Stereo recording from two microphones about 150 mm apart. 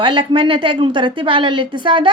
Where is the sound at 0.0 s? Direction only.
35° right (ahead or behind).